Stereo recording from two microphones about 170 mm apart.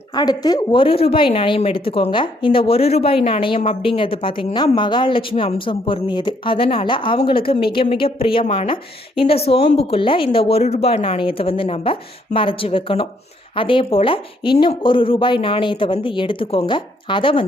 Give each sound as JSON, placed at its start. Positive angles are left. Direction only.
{"t": 0.1, "sound": "speech", "side_deg": 25}